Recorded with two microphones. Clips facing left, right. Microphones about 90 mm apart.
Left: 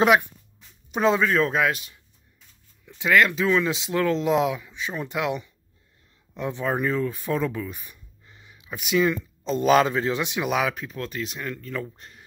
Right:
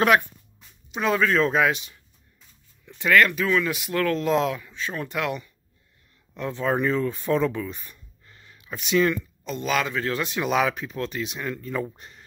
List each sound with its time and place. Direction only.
0.0 s speech: 15° left (ahead or behind)
1.2 s speech: centre (ahead or behind)
2.8 s speech: 10° left (ahead or behind)
6.6 s speech: 5° left (ahead or behind)
9.4 s a man's voice: 35° left (ahead or behind)
10.0 s speech: 15° left (ahead or behind); by 11.9 s 10° right (ahead or behind)